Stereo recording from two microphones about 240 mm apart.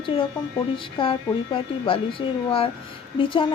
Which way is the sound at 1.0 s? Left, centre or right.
Left.